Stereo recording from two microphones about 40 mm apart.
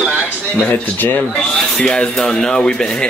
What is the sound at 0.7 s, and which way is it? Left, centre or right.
Speech, left.